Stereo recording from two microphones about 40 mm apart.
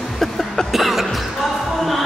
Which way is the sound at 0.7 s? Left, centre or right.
Centre.